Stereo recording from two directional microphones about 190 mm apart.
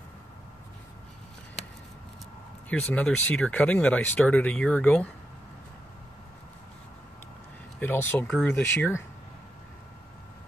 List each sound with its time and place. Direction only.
2.9 s speech: 5° left (ahead or behind)
7.8 s speech: 10° left (ahead or behind)